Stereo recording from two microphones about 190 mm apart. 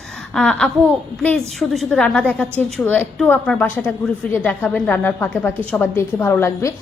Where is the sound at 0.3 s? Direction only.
5° left (ahead or behind).